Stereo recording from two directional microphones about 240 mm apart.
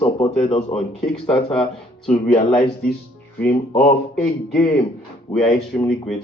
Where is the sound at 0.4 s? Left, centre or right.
Left.